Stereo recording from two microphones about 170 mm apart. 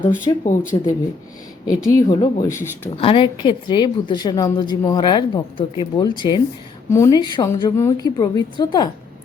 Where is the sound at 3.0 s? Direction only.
30° left (ahead or behind).